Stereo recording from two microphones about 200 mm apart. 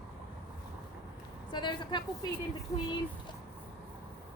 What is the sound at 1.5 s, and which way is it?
Speech, 20° left (ahead or behind).